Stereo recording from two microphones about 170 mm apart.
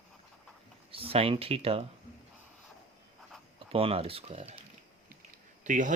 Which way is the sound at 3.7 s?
35° right (ahead or behind).